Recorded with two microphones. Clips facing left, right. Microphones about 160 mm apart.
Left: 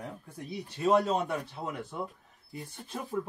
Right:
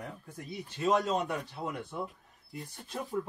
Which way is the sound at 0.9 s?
30° left (ahead or behind).